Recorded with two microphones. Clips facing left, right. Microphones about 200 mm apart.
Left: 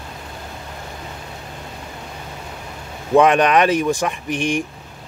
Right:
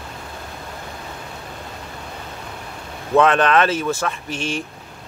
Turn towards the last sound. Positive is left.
turn(degrees=15)  # may be behind; listen again after turning